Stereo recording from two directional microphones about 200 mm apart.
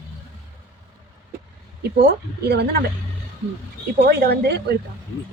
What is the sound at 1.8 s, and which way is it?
A woman's voice, 55° right (ahead or behind).